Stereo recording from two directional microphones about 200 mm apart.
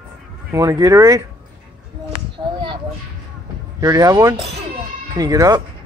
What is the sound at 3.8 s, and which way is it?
Speech, 15° right (ahead or behind).